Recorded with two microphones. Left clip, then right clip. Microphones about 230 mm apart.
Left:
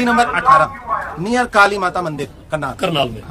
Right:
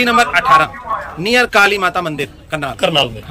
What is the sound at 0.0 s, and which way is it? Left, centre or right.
A man's voice, centre.